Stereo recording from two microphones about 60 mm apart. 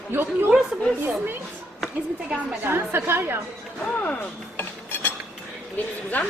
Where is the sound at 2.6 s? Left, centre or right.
Right.